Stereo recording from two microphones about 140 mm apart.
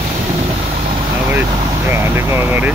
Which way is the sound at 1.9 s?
15° right (ahead or behind).